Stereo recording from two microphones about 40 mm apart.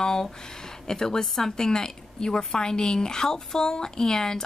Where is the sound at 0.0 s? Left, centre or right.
Centre.